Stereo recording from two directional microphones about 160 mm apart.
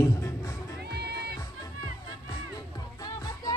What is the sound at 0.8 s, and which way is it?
Music, 90° right.